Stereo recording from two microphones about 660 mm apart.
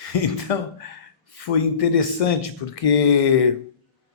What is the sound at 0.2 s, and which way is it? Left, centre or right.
Speech, left.